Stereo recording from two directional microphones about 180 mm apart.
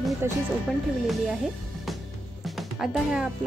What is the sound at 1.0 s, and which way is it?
Speech, centre (ahead or behind).